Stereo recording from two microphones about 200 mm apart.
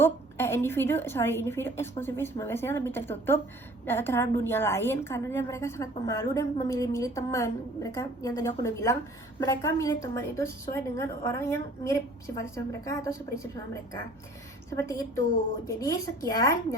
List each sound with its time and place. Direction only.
0.0 s a woman's voice: 10° left (ahead or behind)
14.7 s a woman's voice: 15° left (ahead or behind)